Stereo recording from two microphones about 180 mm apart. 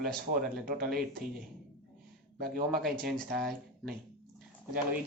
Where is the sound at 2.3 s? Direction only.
60° right (ahead or behind).